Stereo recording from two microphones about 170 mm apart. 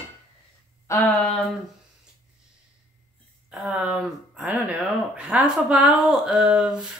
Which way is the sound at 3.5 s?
5° right (ahead or behind).